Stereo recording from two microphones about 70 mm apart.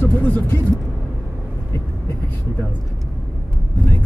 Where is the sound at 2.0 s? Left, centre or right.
Left.